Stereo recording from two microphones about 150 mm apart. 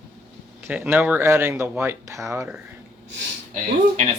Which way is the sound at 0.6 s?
10° right (ahead or behind).